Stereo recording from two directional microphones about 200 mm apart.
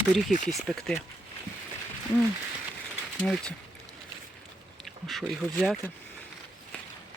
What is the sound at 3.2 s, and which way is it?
Speech, 5° left (ahead or behind).